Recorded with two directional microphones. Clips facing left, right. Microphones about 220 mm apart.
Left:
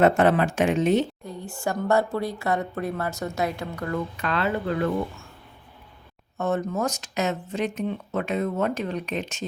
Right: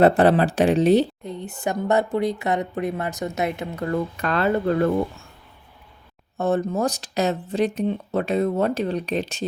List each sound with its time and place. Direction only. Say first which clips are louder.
0.0 s speech: right 3 dB; 35° right (ahead or behind)
1.2 s a woman's voice: right 2 dB; 20° right (ahead or behind)
4.2 s speech: right 5 dB; 45° right (ahead or behind)
6.3 s speech: right 4 dB; 30° right (ahead or behind)